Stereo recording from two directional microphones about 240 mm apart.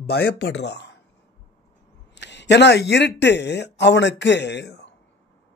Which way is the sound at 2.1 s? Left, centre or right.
Left.